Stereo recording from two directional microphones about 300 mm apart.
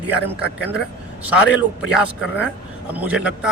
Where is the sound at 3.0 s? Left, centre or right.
Centre.